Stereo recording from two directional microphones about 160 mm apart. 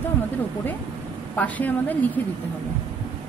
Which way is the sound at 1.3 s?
10° left (ahead or behind).